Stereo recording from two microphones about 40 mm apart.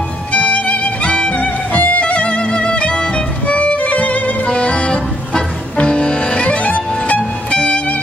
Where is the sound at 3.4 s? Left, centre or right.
Left.